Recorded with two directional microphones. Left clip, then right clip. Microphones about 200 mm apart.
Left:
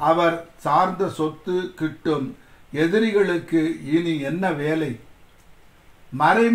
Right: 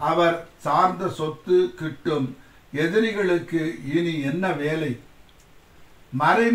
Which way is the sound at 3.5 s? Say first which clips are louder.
Left 4 dB; 55° left (ahead or behind).